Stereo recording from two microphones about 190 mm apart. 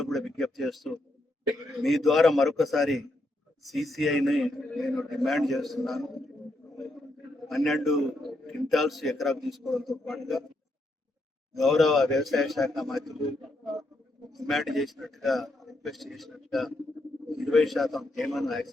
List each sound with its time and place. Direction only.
0.0 s a sound: centre (ahead or behind)
1.8 s a man's voice: centre (ahead or behind)
7.4 s a man's voice: centre (ahead or behind)
11.6 s a man's voice: centre (ahead or behind)
14.3 s a man's voice: centre (ahead or behind)